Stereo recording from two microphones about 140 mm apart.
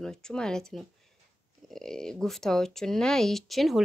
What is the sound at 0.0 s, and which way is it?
Speech, 5° left (ahead or behind).